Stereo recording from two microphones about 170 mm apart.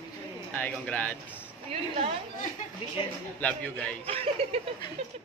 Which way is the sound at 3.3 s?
10° left (ahead or behind).